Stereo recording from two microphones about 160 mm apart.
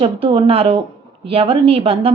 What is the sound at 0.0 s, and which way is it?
A woman's voice, 35° right (ahead or behind).